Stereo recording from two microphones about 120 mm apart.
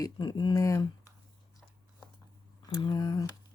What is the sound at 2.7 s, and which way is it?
Speech, 35° left (ahead or behind).